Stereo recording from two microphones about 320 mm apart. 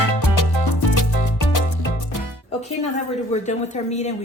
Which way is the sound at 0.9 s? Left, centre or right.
Left.